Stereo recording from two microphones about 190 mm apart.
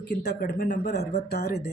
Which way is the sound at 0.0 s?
60° left (ahead or behind).